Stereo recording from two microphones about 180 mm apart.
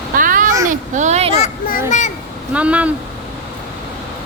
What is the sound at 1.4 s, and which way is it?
Speech, 45° left (ahead or behind).